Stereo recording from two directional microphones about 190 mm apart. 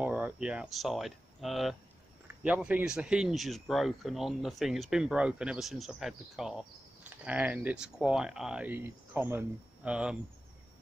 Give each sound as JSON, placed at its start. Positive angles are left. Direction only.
{"t": 0.0, "sound": "speech", "side_deg": -5}